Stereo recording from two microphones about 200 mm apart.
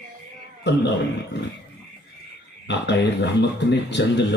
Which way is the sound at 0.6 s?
60° left (ahead or behind).